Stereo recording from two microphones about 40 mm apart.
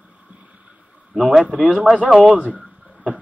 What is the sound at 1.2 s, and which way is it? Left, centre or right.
Speech, centre.